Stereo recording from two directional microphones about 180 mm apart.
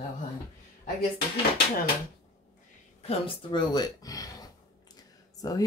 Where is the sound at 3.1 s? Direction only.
25° left (ahead or behind).